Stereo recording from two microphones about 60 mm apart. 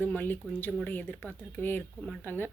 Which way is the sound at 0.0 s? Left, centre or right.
Left.